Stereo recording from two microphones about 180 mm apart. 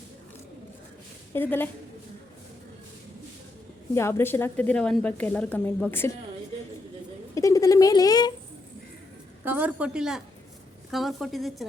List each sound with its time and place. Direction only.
1.3 s a woman's voice: 10° left (ahead or behind)
3.9 s a woman's voice: 15° left (ahead or behind)
7.3 s speech: 20° left (ahead or behind)
9.4 s a woman's voice: 10° right (ahead or behind)